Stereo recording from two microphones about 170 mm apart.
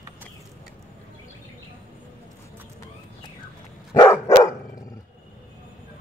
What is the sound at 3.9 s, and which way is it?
Dog, 20° left (ahead or behind).